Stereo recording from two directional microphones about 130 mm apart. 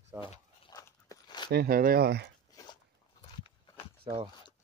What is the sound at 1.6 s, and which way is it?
Speech, 90° right.